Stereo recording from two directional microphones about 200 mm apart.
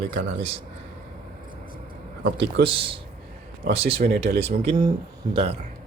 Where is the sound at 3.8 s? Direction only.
50° right (ahead or behind).